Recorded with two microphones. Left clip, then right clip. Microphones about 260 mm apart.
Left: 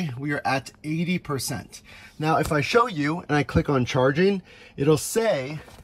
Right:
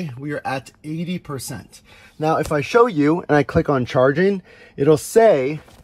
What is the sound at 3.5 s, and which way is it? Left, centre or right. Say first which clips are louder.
Speech: right 5 dB; centre.